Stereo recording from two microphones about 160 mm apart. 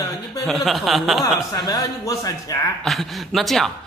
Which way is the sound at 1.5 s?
25° left (ahead or behind).